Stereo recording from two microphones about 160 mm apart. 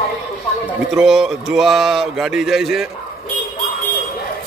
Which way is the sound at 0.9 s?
Centre (ahead or behind).